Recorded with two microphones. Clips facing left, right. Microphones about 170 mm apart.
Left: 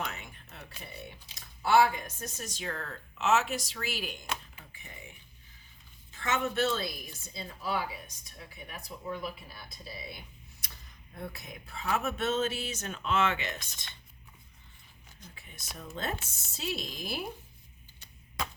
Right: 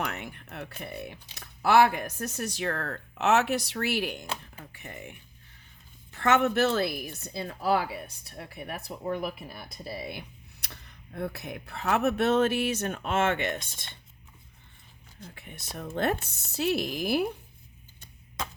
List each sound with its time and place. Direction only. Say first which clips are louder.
0.1 s speech: right 7 dB; 65° right (ahead or behind)
15.2 s speech: right 7 dB; 60° right (ahead or behind)